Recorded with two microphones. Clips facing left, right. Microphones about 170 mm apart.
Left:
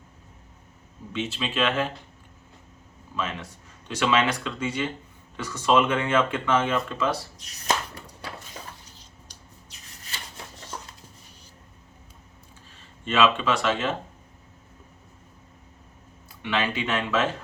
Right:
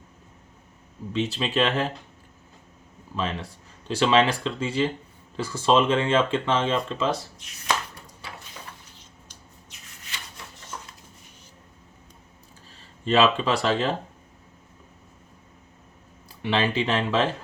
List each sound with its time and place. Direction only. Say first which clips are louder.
1.1 s speech: right 4 dB; 35° right (ahead or behind)
3.2 s speech: right 2 dB; 35° right (ahead or behind)
7.3 s speech: even; 40° left (ahead or behind)
9.0 s a sound: even; 35° left (ahead or behind)
13.1 s speech: right 2 dB; 35° right (ahead or behind)
16.4 s speech: right 3 dB; 30° right (ahead or behind)